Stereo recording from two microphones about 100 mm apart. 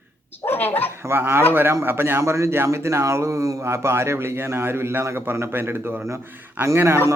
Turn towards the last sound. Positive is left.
turn(degrees=-25)  # may be behind; listen again after turning